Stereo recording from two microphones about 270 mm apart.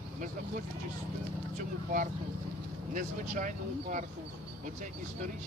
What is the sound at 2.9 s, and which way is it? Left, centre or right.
Speech, right.